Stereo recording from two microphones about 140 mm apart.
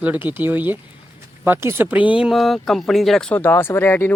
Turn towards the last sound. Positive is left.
turn(degrees=15)  # may be behind; listen again after turning